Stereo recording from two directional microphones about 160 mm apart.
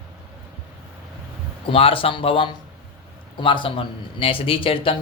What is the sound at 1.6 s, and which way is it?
Speech, 35° left (ahead or behind).